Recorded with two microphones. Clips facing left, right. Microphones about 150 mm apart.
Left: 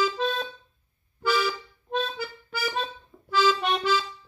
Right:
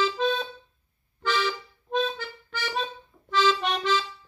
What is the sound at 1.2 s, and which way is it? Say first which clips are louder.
Music: left 2 dB; 10° left (ahead or behind).